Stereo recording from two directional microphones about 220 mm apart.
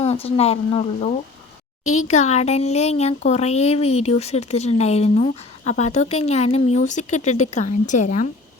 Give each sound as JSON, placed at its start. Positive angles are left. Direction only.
{"t": 0.0, "sound": "a child's voice", "side_deg": 25}
{"t": 1.8, "sound": "a child's voice", "side_deg": 70}
{"t": 2.0, "sound": "a child's voice", "side_deg": 30}